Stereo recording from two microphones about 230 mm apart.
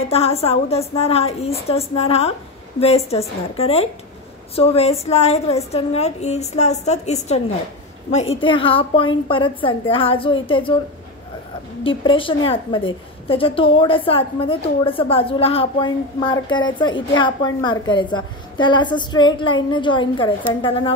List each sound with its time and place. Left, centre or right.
0.1 s a woman's voice: left
11.8 s a woman's voice: left